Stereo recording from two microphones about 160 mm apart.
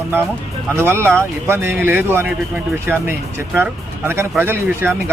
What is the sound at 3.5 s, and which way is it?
Speech, 15° right (ahead or behind).